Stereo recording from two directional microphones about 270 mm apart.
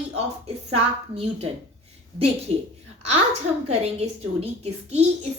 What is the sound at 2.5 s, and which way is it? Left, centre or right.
Speech, right.